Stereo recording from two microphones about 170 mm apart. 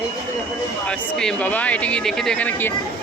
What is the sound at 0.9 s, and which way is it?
Speech, 5° left (ahead or behind).